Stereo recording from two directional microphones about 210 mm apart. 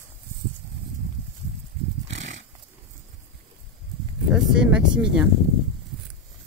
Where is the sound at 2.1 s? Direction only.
65° right (ahead or behind).